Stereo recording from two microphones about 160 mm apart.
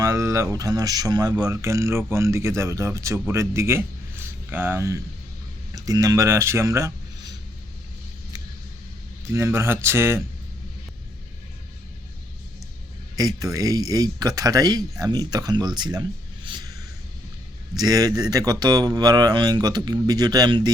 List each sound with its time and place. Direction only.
0.0 s speech: 20° right (ahead or behind)
9.3 s speech: 20° right (ahead or behind)
13.1 s speech: 25° right (ahead or behind)
17.7 s speech: 25° right (ahead or behind)